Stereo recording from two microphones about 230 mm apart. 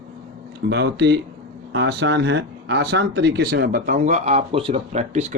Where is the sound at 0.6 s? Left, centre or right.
Right.